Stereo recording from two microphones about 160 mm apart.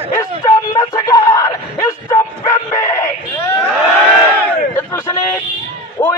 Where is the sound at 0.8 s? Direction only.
20° left (ahead or behind).